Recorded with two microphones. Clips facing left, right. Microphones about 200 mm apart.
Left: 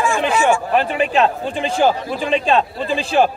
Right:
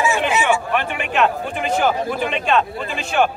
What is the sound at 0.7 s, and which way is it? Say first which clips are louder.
A man's voice: left 4 dB; 35° left (ahead or behind).